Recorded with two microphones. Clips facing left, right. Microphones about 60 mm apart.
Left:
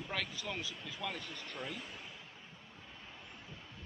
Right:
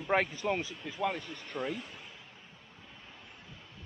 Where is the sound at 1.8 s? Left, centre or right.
Centre.